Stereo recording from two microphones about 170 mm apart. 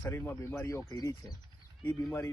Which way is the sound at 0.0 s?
10° left (ahead or behind).